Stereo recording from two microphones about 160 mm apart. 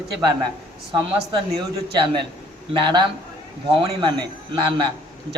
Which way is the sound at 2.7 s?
30° right (ahead or behind).